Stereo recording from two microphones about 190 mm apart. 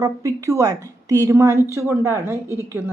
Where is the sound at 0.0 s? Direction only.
15° right (ahead or behind).